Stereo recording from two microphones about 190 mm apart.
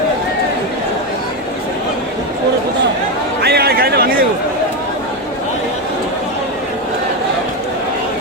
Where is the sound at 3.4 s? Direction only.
60° right (ahead or behind).